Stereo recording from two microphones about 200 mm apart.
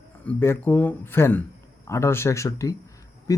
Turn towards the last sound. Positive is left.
turn(degrees=15)  # may be behind; listen again after turning